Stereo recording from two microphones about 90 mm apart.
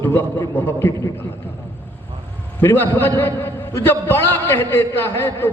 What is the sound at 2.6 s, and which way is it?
A man's voice, 25° left (ahead or behind).